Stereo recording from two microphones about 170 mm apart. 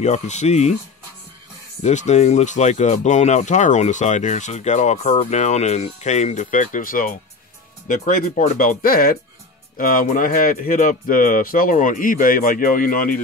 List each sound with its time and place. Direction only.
0.0 s speech: 40° left (ahead or behind)
1.8 s speech: 45° left (ahead or behind)